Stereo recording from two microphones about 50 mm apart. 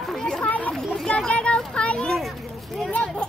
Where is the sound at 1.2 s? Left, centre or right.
Centre.